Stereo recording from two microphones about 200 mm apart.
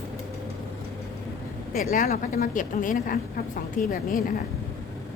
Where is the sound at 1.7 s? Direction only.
45° left (ahead or behind).